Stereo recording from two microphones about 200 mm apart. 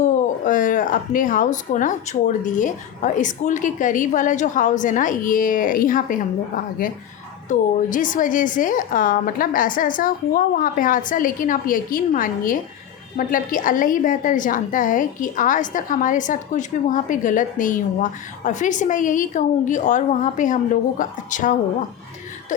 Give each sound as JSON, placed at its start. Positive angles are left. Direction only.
{"t": 0.0, "sound": "a woman's voice", "side_deg": 40}
{"t": 7.4, "sound": "a woman's voice", "side_deg": 40}